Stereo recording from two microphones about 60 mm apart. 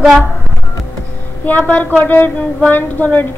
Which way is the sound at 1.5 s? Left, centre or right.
Left.